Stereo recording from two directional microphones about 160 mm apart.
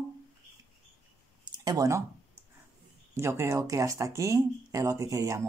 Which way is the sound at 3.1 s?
15° right (ahead or behind).